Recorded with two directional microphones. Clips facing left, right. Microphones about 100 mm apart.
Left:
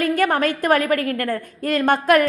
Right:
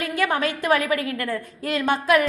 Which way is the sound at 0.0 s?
45° left (ahead or behind).